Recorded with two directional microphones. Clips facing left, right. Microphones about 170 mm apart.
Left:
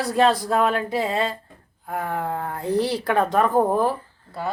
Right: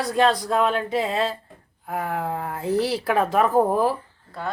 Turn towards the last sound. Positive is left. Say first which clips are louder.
# even
turn(degrees=-5)  # may be behind; listen again after turning